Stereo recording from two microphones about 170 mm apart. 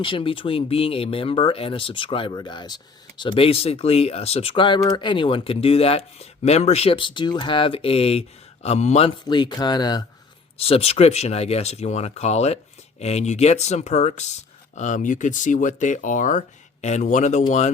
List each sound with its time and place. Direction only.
0.0 s speech: 30° left (ahead or behind)
10.6 s speech: 35° left (ahead or behind)